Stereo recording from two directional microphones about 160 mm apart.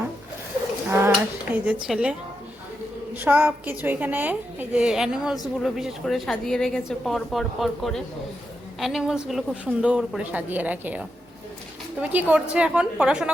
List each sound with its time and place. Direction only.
0.9 s a sound: 15° right (ahead or behind)
1.5 s a woman's voice: 5° right (ahead or behind)
3.2 s a woman's voice: 10° right (ahead or behind)